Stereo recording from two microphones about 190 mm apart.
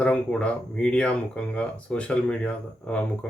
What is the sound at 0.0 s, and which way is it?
Speech, 5° left (ahead or behind).